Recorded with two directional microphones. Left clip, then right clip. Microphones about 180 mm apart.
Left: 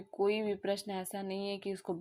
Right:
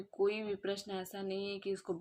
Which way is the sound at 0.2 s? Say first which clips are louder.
Left 2 dB; 30° left (ahead or behind).